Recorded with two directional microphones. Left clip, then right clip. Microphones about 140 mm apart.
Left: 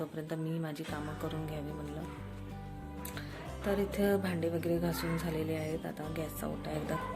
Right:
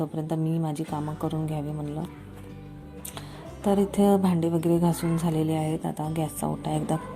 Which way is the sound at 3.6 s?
40° right (ahead or behind).